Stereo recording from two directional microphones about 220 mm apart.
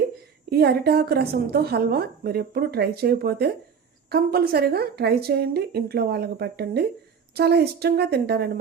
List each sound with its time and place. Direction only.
0.5 s a woman's voice: 45° right (ahead or behind)